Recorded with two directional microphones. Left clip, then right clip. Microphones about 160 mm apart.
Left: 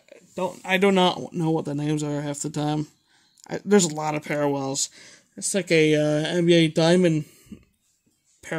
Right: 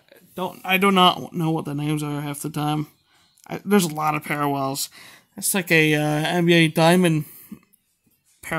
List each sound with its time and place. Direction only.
0.1 s speech: 5° right (ahead or behind); by 7.4 s 30° right (ahead or behind)